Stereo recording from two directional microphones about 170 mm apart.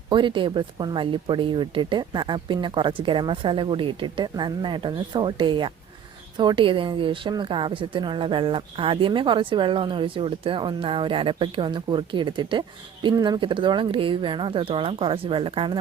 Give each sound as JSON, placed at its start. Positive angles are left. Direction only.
{"t": 0.1, "sound": "speech", "side_deg": -30}